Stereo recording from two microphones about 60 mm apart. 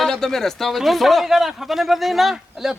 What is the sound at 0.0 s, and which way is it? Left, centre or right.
Speech, centre.